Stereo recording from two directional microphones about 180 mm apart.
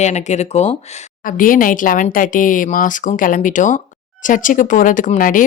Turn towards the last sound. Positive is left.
turn(degrees=45)  # may be behind; listen again after turning